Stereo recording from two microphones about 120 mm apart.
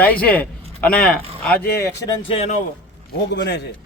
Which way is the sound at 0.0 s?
10° left (ahead or behind).